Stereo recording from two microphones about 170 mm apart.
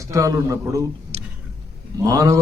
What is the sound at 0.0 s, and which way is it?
Speech, 20° right (ahead or behind).